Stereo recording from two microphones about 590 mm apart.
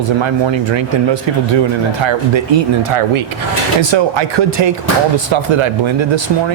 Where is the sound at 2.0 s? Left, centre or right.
Right.